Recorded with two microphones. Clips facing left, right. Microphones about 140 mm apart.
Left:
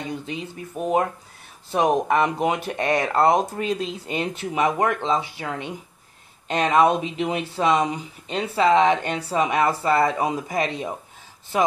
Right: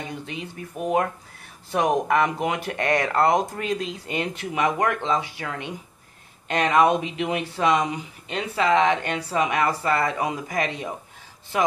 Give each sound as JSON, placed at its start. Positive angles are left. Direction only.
{"t": 0.3, "sound": "speech", "side_deg": 25}